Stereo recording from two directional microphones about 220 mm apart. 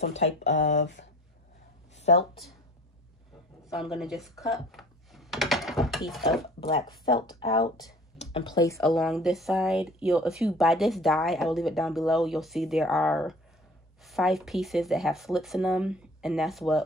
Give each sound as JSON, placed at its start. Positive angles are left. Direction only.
{"t": 0.4, "sound": "speech", "side_deg": 55}
{"t": 2.0, "sound": "a sound", "side_deg": 30}
{"t": 3.7, "sound": "computer keyboard", "side_deg": 0}
{"t": 6.8, "sound": "speech", "side_deg": 20}
{"t": 8.8, "sound": "speech", "side_deg": 0}